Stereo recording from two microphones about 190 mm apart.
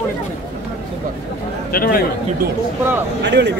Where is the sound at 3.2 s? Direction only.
65° right (ahead or behind).